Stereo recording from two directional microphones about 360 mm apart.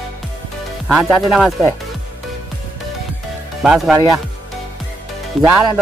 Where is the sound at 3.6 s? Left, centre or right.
Centre.